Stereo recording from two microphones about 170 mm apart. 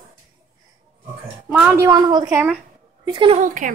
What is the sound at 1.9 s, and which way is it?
A woman's voice, 25° right (ahead or behind).